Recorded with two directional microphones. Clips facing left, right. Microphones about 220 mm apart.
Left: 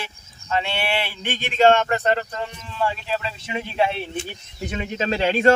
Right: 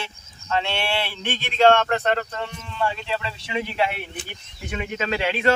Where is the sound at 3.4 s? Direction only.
25° left (ahead or behind).